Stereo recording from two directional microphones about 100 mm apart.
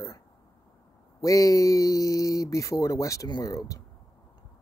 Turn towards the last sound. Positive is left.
turn(degrees=35)  # may be behind; listen again after turning